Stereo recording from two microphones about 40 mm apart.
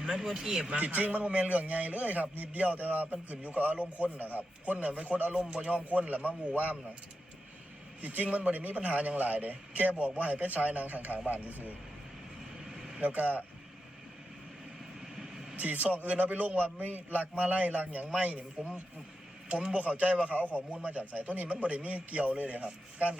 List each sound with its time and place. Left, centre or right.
0.0 s speech: centre
0.8 s a man's voice: right
5.4 s a man's voice: right
8.0 s a man's voice: right
13.0 s a man's voice: right
15.5 s a man's voice: right